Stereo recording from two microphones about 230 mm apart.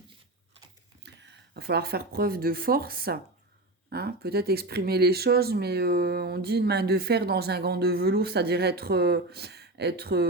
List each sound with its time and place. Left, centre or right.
1.0 s speech: right